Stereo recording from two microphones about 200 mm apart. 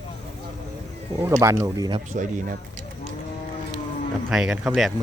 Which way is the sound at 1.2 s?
15° right (ahead or behind).